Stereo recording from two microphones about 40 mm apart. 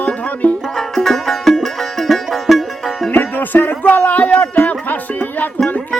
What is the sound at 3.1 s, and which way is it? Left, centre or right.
Music, left.